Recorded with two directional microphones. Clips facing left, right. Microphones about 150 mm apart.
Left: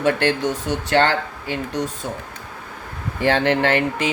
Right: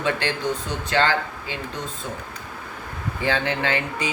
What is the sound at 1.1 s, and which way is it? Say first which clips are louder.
Speech: left 2 dB; 55° left (ahead or behind).